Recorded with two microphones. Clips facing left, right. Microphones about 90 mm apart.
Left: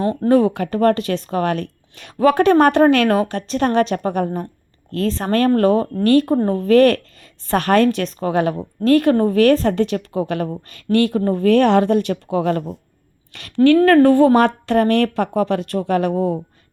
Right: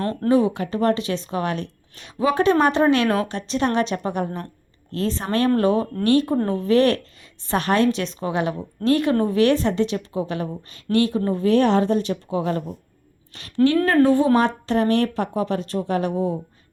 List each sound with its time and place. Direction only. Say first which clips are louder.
0.0 s speech: left 5 dB; 15° left (ahead or behind)
0.3 s a woman's voice: left 3 dB; 55° left (ahead or behind)